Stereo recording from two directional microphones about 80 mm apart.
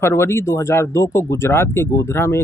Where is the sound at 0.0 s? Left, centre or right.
Left.